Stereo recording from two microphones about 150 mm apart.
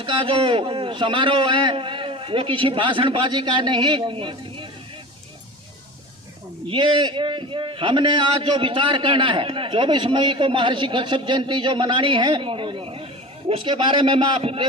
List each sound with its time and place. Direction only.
0.0 s a man's voice: 35° right (ahead or behind)
6.7 s a man's voice: 35° right (ahead or behind)